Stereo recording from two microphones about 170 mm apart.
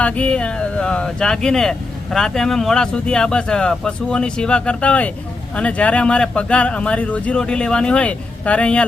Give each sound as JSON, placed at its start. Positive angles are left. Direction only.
{"t": 0.0, "sound": "speech", "side_deg": 5}